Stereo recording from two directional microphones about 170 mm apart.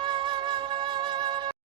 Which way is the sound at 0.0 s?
30° right (ahead or behind).